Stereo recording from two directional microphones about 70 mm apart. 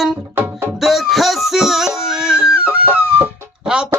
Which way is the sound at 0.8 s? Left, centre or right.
Centre.